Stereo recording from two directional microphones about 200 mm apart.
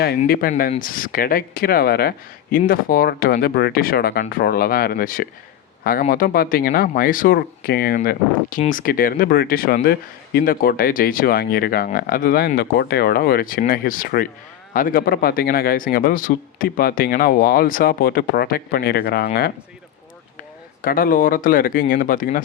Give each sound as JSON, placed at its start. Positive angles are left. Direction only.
{"t": 0.0, "sound": "speech", "side_deg": 45}
{"t": 20.8, "sound": "speech", "side_deg": 45}